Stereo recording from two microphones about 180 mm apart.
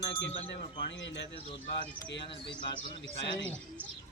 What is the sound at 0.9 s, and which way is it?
Speech, 85° left.